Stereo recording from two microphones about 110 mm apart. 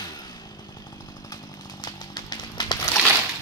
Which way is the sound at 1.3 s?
40° left (ahead or behind).